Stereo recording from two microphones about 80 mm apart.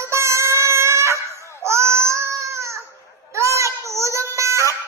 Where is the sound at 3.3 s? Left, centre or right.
Right.